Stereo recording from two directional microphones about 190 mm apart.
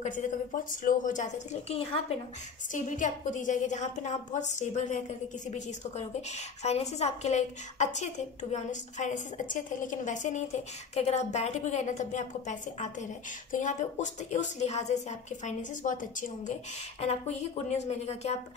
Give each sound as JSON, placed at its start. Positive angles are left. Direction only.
{"t": 0.0, "sound": "a woman's voice", "side_deg": 40}
{"t": 6.6, "sound": "a woman's voice", "side_deg": 35}